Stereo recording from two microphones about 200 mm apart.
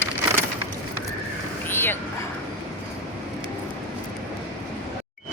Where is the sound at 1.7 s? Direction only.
10° left (ahead or behind).